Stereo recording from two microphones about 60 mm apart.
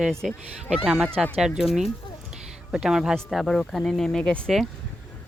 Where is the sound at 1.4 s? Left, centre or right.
Centre.